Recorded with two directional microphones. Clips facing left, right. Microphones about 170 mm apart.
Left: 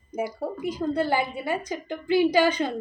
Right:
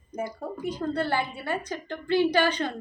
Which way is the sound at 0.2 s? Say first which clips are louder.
Left 3 dB; 10° left (ahead or behind).